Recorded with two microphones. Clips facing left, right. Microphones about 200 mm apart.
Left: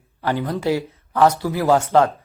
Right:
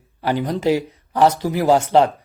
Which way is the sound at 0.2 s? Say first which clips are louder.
Right 2 dB; 15° right (ahead or behind).